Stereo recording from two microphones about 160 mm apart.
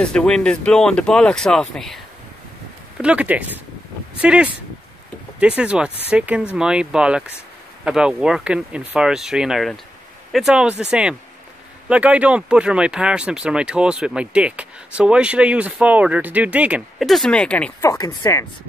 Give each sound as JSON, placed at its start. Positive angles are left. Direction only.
{"t": 0.0, "sound": "speech", "side_deg": 5}
{"t": 3.0, "sound": "speech", "side_deg": -10}
{"t": 17.8, "sound": "speech", "side_deg": 25}